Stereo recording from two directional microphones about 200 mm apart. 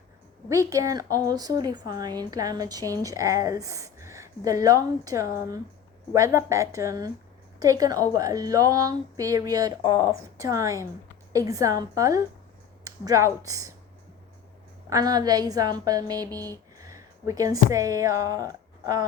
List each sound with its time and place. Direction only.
0.4 s a woman's voice: 15° right (ahead or behind)
14.8 s a woman's voice: 20° right (ahead or behind)